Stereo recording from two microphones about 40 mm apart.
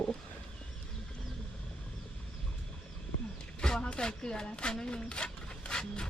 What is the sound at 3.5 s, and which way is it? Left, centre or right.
Speech, left.